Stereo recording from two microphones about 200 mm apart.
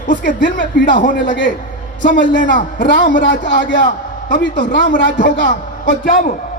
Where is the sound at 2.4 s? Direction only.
40° left (ahead or behind).